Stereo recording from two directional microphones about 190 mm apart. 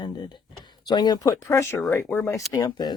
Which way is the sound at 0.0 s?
25° left (ahead or behind).